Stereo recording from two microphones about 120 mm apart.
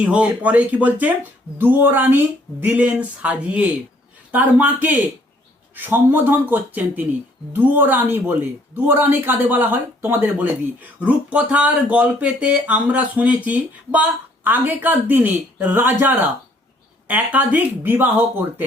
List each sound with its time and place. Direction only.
0.0 s speech: 10° right (ahead or behind)